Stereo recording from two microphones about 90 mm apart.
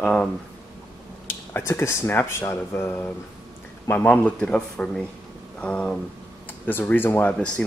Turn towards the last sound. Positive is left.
turn(degrees=10)  # may be behind; listen again after turning